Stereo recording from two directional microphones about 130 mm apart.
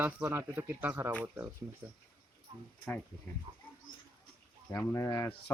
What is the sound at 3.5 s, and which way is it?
Bird, 35° right (ahead or behind).